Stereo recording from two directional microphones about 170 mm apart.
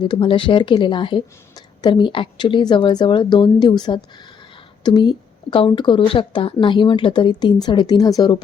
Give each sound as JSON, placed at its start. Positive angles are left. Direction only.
{"t": 0.0, "sound": "a woman's voice", "side_deg": 30}